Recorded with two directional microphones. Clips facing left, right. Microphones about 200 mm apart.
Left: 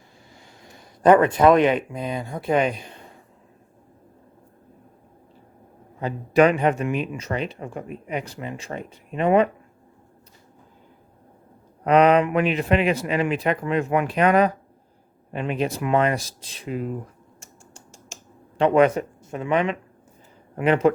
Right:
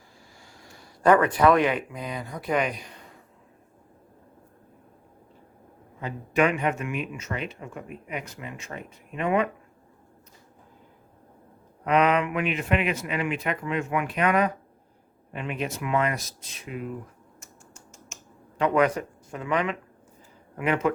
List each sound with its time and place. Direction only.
0.6 s speech: 20° left (ahead or behind)
6.0 s speech: 35° left (ahead or behind)
11.9 s speech: 35° left (ahead or behind)
17.4 s computer keyboard: 30° left (ahead or behind)
20.6 s speech: 30° left (ahead or behind)